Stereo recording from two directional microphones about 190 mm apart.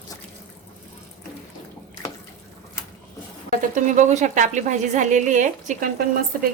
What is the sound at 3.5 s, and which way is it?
A woman's voice, 45° right (ahead or behind).